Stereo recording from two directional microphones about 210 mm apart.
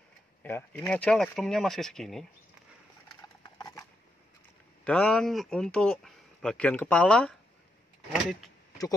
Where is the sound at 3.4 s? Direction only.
20° left (ahead or behind).